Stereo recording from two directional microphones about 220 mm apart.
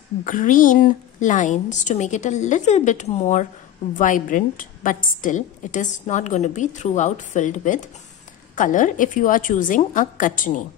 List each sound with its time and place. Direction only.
0.2 s a woman's voice: 35° left (ahead or behind)